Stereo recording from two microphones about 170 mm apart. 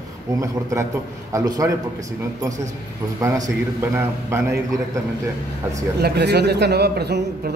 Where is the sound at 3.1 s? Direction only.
20° right (ahead or behind).